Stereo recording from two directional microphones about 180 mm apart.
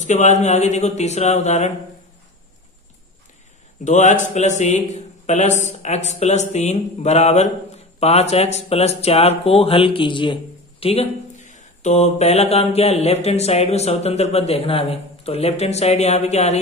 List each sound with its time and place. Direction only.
0.0 s speech: 40° left (ahead or behind)
3.8 s speech: 40° left (ahead or behind)